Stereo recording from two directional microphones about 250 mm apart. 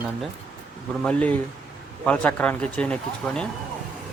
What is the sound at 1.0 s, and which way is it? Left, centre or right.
Speech, centre.